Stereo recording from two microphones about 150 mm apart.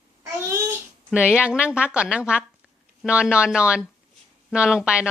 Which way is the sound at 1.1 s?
5° right (ahead or behind).